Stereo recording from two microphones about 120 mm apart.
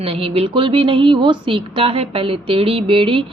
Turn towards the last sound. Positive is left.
turn(degrees=-45)  # may be behind; listen again after turning